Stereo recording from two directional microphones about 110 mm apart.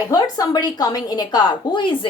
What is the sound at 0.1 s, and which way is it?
A woman's voice, 35° left (ahead or behind).